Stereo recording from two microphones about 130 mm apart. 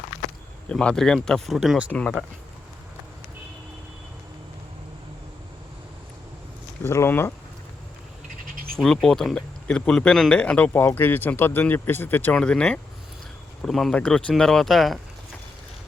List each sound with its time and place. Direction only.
0.7 s speech: 5° left (ahead or behind)
1.9 s speech: 10° left (ahead or behind)
6.8 s speech: 20° left (ahead or behind)
8.7 s speech: 5° left (ahead or behind)